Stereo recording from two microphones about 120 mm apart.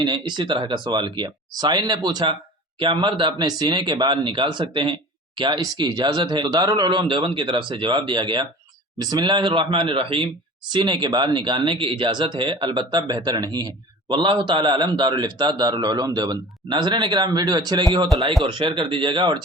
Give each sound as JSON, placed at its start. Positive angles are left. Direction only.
{"t": 0.0, "sound": "speech", "side_deg": -40}